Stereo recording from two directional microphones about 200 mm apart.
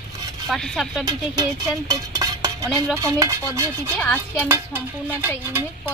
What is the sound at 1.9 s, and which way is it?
Dishes, 15° right (ahead or behind).